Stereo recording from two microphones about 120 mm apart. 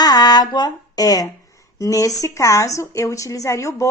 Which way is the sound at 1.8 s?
30° left (ahead or behind).